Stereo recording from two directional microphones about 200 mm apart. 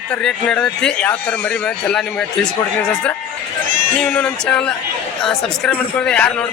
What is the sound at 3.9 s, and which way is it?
A man's voice, 10° left (ahead or behind).